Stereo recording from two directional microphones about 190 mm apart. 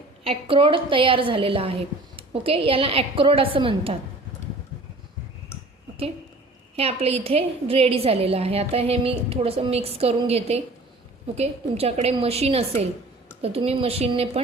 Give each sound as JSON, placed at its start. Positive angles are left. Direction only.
{"t": 0.3, "sound": "a woman's voice", "side_deg": -30}
{"t": 6.7, "sound": "a woman's voice", "side_deg": -30}